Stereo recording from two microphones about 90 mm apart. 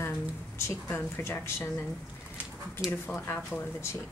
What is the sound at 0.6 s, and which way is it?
A woman's voice, 30° left (ahead or behind).